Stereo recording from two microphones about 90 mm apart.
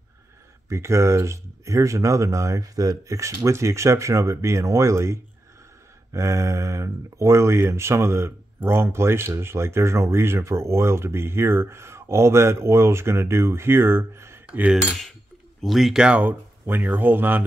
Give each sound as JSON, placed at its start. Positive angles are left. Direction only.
{"t": 0.7, "sound": "speech", "side_deg": -30}
{"t": 14.8, "sound": "cutlery", "side_deg": 0}
{"t": 15.6, "sound": "speech", "side_deg": 0}